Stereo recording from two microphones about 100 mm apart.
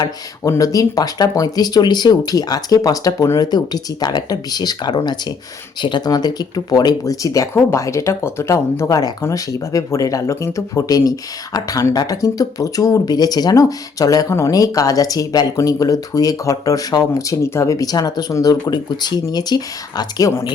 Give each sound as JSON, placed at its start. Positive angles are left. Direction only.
{"t": 0.4, "sound": "speech", "side_deg": 35}